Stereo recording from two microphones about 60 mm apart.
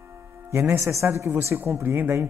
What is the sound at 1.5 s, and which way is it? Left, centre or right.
Speech, right.